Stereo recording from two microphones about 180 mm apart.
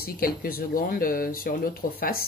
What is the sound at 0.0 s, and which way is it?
Speech, 55° left (ahead or behind).